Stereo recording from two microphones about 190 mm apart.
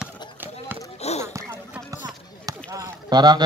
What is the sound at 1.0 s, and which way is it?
Basketball bounce, 35° left (ahead or behind).